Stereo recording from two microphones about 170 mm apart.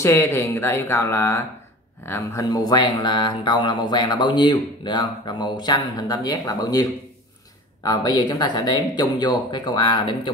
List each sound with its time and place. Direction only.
0.0 s speech: 15° left (ahead or behind)